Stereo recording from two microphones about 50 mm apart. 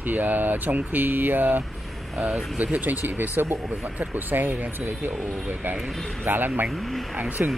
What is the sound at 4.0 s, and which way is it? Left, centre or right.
Speech, right.